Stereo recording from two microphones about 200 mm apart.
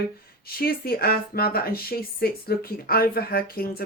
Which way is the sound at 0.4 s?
50° left (ahead or behind).